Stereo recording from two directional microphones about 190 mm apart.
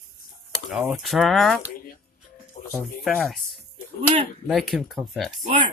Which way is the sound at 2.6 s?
40° left (ahead or behind).